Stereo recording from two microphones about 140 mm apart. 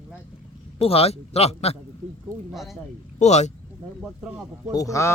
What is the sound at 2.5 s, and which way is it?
Speech, centre (ahead or behind).